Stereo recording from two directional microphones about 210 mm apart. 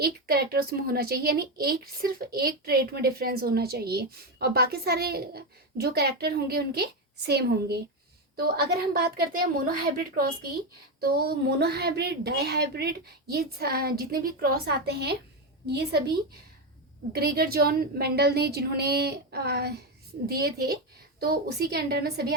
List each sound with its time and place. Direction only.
0.0 s a woman's voice: 45° right (ahead or behind)